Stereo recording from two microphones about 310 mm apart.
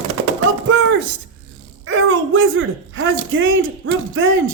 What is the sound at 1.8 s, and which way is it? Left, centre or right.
Speech, right.